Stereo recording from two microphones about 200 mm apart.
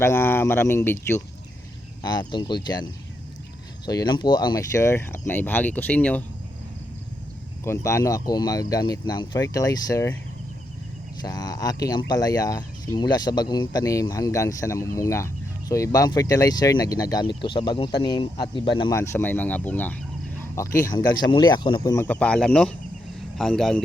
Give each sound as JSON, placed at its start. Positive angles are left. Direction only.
{"t": 0.0, "sound": "speech", "side_deg": 10}
{"t": 2.0, "sound": "speech", "side_deg": 20}
{"t": 7.6, "sound": "speech", "side_deg": 15}
{"t": 11.2, "sound": "speech", "side_deg": 20}
{"t": 18.9, "sound": "speech", "side_deg": 15}
{"t": 20.9, "sound": "speech", "side_deg": 20}